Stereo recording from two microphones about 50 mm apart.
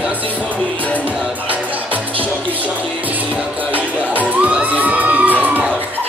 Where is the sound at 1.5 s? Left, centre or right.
Right.